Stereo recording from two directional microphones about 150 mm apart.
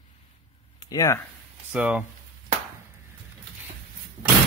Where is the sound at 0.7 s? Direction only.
25° left (ahead or behind).